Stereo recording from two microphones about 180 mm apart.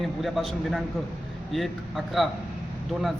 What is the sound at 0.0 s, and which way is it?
Speech, centre (ahead or behind).